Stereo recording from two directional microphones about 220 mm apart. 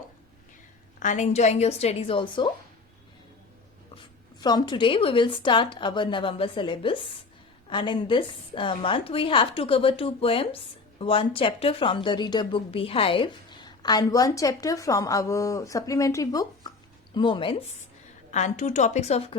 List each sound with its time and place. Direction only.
0.9 s a woman's voice: 35° left (ahead or behind)
3.9 s a woman's voice: 20° left (ahead or behind)